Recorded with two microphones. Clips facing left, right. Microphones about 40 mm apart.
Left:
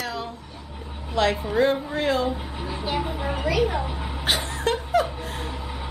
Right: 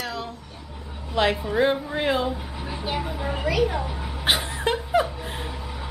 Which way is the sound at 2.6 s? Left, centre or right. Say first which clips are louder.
Left 2 dB; centre.